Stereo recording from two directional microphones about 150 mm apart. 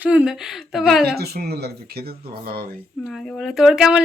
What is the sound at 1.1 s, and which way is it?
Speech, 90° right.